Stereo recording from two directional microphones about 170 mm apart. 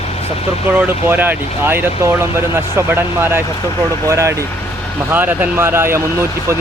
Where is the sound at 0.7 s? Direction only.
10° right (ahead or behind).